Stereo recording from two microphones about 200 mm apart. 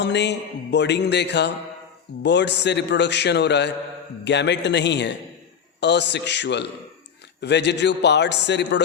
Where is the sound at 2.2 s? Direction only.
60° left (ahead or behind).